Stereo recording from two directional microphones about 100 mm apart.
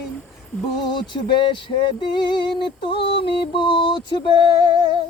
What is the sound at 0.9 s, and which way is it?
Music, 50° left (ahead or behind).